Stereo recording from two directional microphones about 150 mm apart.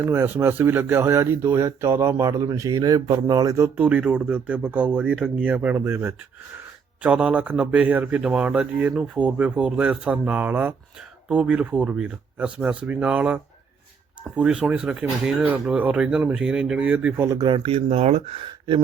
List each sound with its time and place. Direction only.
0.0 s speech: 15° right (ahead or behind)
3.8 s speech: 10° right (ahead or behind)
17.2 s speech: 25° right (ahead or behind)